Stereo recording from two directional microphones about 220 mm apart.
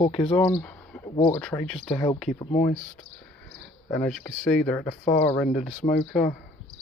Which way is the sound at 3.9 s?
5° left (ahead or behind).